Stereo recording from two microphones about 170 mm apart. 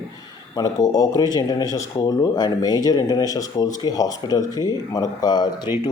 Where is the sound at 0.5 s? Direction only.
25° left (ahead or behind).